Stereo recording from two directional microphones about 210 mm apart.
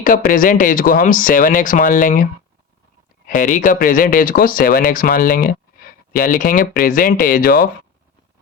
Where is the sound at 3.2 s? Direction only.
40° left (ahead or behind).